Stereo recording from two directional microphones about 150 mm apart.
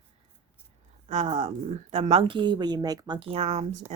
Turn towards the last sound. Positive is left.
turn(degrees=-45)  # may be behind; listen again after turning